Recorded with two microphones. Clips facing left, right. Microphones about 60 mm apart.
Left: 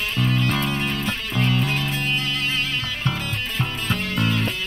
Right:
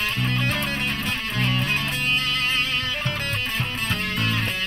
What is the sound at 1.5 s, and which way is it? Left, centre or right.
Music, right.